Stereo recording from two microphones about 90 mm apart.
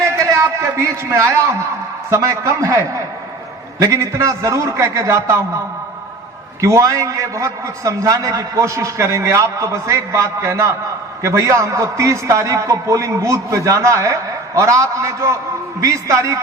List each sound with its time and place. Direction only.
0.0 s a man's voice: 30° right (ahead or behind)
6.6 s a man's voice: 35° right (ahead or behind)